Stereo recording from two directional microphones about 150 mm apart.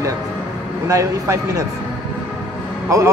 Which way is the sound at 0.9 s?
20° right (ahead or behind).